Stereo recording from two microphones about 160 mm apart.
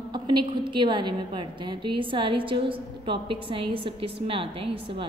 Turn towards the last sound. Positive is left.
turn(degrees=-35)  # may be behind; listen again after turning